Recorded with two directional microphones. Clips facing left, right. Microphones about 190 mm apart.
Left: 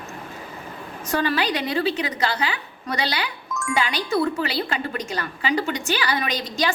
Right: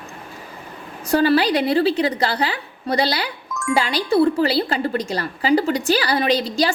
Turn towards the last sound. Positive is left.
turn(degrees=-30)  # may be behind; listen again after turning